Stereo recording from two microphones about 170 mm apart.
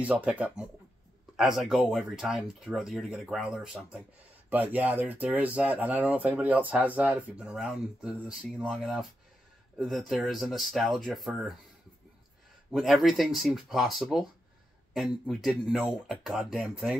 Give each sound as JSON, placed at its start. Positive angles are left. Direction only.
{"t": 0.0, "sound": "speech", "side_deg": -10}
{"t": 12.7, "sound": "speech", "side_deg": 0}